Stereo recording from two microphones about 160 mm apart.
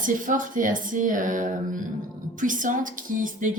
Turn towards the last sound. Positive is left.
turn(degrees=-55)  # may be behind; listen again after turning